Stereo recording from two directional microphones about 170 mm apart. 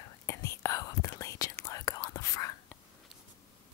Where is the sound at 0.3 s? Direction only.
15° left (ahead or behind).